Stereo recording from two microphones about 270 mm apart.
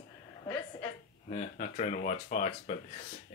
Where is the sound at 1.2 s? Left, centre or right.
Left.